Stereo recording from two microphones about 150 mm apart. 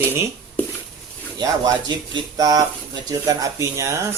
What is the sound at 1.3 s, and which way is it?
Speech, 25° right (ahead or behind).